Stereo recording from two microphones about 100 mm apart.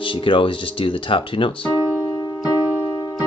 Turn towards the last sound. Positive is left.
turn(degrees=-20)  # may be behind; listen again after turning